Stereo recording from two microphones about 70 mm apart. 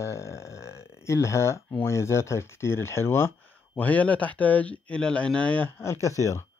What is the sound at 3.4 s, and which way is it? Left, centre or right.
Speech, left.